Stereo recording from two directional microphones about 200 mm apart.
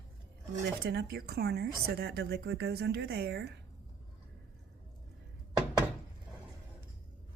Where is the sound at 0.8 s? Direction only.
50° right (ahead or behind).